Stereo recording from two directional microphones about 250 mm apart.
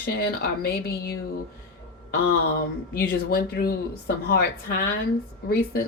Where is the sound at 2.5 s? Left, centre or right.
Left.